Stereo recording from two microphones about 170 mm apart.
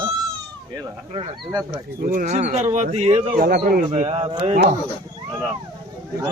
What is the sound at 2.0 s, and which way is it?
Speech, 55° right (ahead or behind).